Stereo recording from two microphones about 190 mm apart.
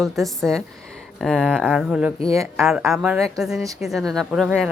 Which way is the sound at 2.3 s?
15° right (ahead or behind).